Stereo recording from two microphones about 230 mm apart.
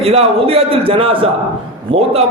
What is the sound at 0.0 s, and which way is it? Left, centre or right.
A man's voice, right.